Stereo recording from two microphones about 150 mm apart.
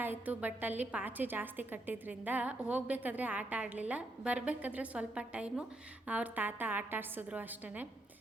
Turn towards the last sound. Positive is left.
turn(degrees=-10)  # may be behind; listen again after turning